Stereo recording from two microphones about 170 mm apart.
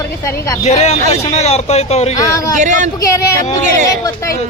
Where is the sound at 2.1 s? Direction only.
20° left (ahead or behind).